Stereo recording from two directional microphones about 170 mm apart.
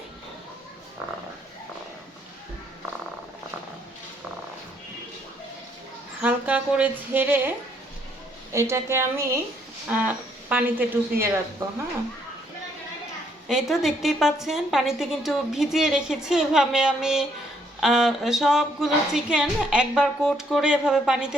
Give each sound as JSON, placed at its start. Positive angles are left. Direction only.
{"t": 6.2, "sound": "a sound", "side_deg": -10}
{"t": 8.5, "sound": "a woman's voice", "side_deg": -15}
{"t": 13.5, "sound": "a woman's voice", "side_deg": 0}